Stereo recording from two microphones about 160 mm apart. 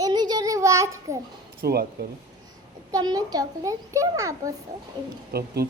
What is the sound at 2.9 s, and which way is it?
A child's voice, 25° right (ahead or behind).